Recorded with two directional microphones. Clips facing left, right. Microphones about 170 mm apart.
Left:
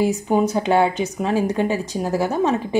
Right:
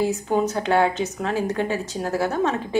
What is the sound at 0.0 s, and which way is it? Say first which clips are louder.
A woman's voice: left 3 dB; 15° left (ahead or behind).